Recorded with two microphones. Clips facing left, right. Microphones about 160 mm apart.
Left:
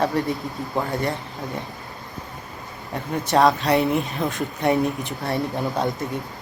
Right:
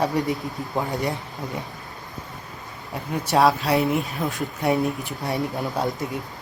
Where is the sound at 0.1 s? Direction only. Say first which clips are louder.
Even; 15° right (ahead or behind).